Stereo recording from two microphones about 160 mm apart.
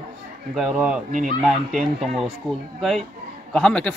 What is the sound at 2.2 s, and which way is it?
Speech, centre (ahead or behind).